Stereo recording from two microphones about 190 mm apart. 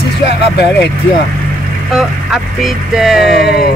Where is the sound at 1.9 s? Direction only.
Centre (ahead or behind).